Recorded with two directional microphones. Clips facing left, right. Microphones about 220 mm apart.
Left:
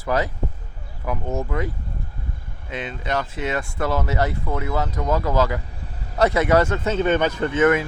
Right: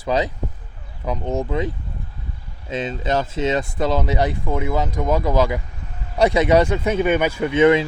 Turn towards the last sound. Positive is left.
turn(degrees=-15)  # may be behind; listen again after turning